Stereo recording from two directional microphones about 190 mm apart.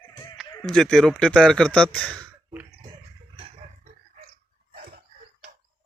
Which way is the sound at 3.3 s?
30° right (ahead or behind).